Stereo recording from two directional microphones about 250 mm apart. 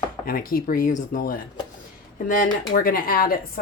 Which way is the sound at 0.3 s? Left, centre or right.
Left.